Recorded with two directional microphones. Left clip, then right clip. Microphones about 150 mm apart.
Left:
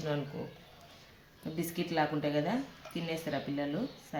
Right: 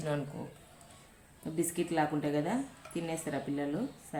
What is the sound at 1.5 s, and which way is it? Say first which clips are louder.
A woman's voice: right 1 dB; 45° left (ahead or behind).